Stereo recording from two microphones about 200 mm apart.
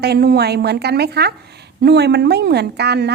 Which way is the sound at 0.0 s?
55° right (ahead or behind).